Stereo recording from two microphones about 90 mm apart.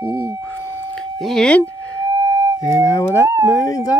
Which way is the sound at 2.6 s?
35° left (ahead or behind).